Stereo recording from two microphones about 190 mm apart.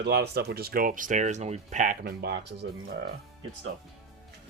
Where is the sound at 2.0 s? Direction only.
60° right (ahead or behind).